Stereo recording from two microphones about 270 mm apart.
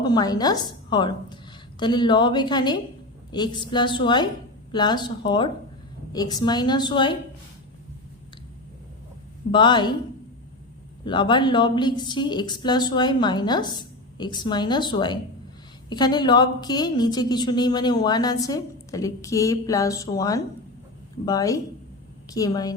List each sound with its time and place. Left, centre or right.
0.0 s a woman's voice: centre
9.5 s a woman's voice: centre
11.0 s a woman's voice: centre